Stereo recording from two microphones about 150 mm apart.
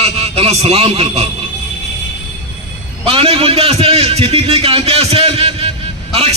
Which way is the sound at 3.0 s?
40° right (ahead or behind).